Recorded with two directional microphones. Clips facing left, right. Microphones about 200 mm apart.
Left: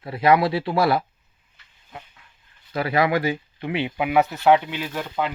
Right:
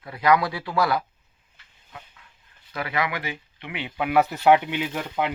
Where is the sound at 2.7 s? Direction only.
35° left (ahead or behind).